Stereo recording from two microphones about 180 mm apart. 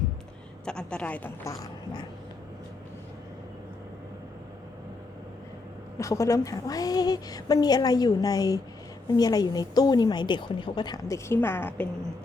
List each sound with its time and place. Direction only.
0.6 s speech: 5° left (ahead or behind); by 2.0 s 20° left (ahead or behind)
6.0 s a woman's voice: 20° left (ahead or behind)